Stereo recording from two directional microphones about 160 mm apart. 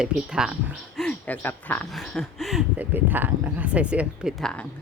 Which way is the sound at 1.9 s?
Centre (ahead or behind).